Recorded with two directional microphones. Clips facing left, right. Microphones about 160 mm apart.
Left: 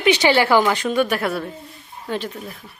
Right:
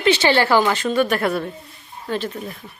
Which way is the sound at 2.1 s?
15° left (ahead or behind).